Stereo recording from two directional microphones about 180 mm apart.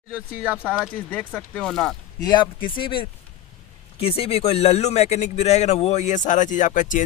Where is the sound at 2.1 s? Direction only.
25° left (ahead or behind).